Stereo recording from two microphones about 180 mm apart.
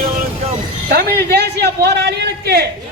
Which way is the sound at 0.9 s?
55° right (ahead or behind).